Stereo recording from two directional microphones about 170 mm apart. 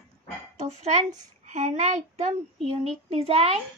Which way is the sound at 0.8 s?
45° right (ahead or behind).